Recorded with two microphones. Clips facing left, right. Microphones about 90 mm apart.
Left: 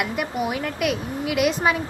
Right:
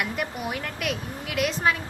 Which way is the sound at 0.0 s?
5° left (ahead or behind).